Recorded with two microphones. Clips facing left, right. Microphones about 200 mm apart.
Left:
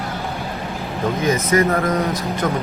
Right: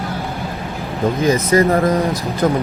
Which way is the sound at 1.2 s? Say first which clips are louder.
Right 3 dB; 30° right (ahead or behind).